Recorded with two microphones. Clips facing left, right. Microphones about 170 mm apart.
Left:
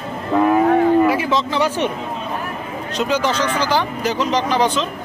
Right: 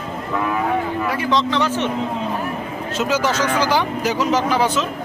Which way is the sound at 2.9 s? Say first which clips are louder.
Left 1 dB; 5° right (ahead or behind).